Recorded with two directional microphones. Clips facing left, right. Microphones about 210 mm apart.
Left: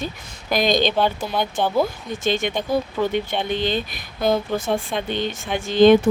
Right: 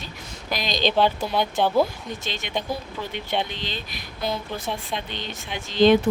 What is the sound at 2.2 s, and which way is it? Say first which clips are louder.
Speech: left 9 dB; 50° left (ahead or behind).